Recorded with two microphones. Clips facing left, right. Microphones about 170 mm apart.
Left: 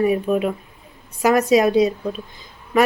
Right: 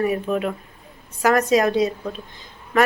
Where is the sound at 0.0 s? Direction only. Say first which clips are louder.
Left 3 dB; 20° left (ahead or behind).